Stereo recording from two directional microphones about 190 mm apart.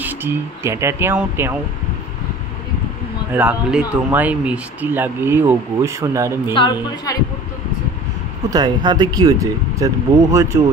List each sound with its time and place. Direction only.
0.0 s speech: 10° right (ahead or behind)
3.3 s speech: 5° right (ahead or behind)
6.5 s a woman's voice: 25° left (ahead or behind)
8.5 s speech: 20° right (ahead or behind)